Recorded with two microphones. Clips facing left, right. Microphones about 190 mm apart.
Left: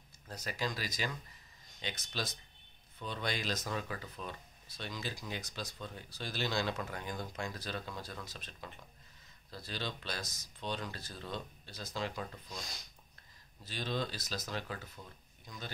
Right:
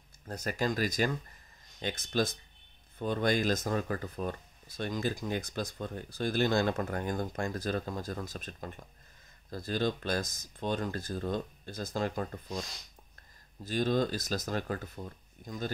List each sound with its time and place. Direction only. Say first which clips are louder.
0.3 s speech: right 7 dB; 50° right (ahead or behind)
13.7 s speech: right 9 dB; 45° right (ahead or behind)